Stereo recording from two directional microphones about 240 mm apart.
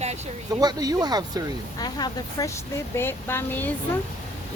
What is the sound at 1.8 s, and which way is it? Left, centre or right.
Speech, centre.